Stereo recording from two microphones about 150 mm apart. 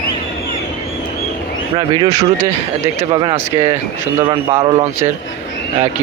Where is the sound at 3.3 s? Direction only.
20° right (ahead or behind).